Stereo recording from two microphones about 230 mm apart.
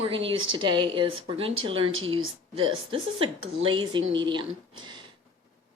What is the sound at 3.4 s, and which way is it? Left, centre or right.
Speech, right.